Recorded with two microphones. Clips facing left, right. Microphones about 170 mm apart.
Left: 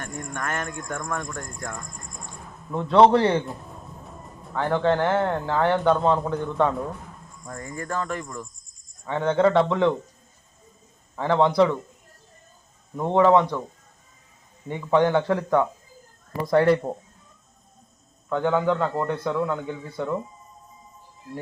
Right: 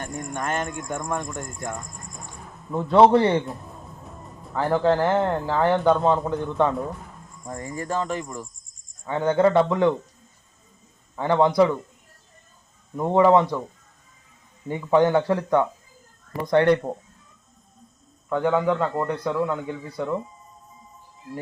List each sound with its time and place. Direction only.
0.0 s cricket: 25° right (ahead or behind)
2.7 s speech: centre (ahead or behind)
7.4 s cricket: 25° right (ahead or behind)
9.0 s speech: centre (ahead or behind)
11.2 s speech: centre (ahead or behind)
13.0 s speech: 10° right (ahead or behind)
14.7 s speech: 5° right (ahead or behind)
18.3 s speech: 5° right (ahead or behind)